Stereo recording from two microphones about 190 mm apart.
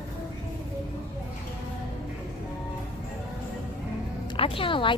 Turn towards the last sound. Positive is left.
turn(degrees=25)  # may be behind; listen again after turning